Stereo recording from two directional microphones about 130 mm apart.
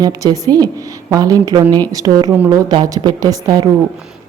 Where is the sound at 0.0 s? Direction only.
30° right (ahead or behind).